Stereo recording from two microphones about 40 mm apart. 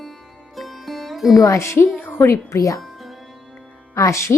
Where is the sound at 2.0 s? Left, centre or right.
Left.